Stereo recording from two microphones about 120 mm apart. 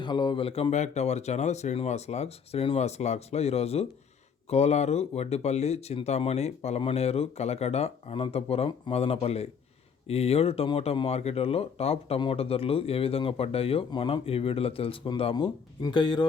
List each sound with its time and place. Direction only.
0.0 s speech: 40° left (ahead or behind)
0.7 s speech: 70° left (ahead or behind); by 16.2 s 40° left (ahead or behind)